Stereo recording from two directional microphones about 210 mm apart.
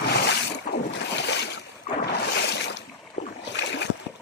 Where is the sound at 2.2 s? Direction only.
55° left (ahead or behind).